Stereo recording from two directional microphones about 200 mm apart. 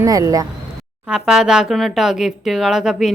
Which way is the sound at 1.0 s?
5° right (ahead or behind).